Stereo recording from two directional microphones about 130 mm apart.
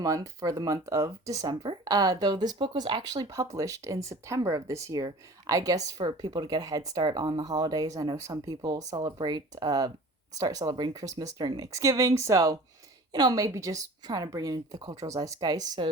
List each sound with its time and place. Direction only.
0.0 s speech: 25° right (ahead or behind)